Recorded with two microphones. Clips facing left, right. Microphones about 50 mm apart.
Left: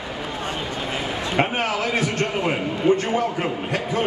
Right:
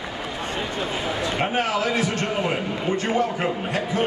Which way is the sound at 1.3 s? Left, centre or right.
Left.